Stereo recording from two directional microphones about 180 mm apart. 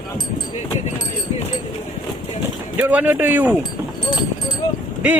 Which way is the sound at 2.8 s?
10° right (ahead or behind).